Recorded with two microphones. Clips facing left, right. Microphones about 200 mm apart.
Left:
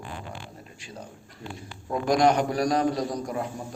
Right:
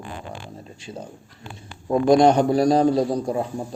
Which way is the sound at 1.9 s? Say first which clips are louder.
Right 6 dB; 25° right (ahead or behind).